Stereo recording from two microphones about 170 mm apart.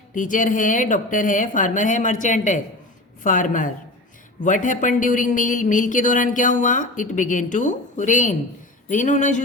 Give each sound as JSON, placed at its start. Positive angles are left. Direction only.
{"t": 0.1, "sound": "speech", "side_deg": 50}